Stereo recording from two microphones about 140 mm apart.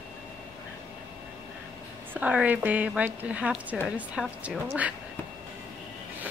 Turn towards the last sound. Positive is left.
turn(degrees=-5)  # may be behind; listen again after turning